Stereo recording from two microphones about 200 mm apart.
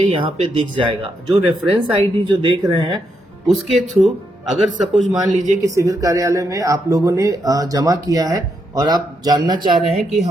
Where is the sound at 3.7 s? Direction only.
35° right (ahead or behind).